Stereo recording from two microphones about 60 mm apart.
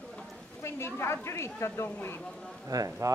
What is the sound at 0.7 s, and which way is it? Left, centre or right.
A woman's voice, left.